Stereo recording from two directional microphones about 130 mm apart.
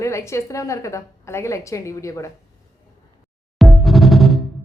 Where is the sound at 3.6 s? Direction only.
Centre (ahead or behind).